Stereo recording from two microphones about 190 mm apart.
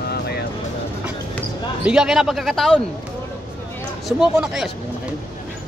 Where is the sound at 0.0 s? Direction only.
60° left (ahead or behind).